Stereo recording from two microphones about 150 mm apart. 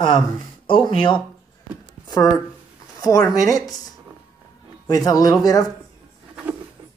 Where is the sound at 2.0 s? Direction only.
25° left (ahead or behind).